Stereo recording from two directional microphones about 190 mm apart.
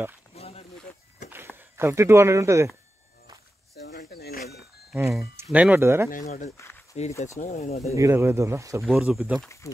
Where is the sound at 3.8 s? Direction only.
60° left (ahead or behind).